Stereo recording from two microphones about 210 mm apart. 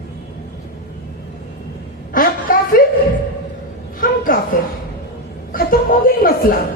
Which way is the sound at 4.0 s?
40° left (ahead or behind).